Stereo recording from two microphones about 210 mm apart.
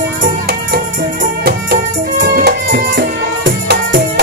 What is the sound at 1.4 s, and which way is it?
Music, 45° right (ahead or behind).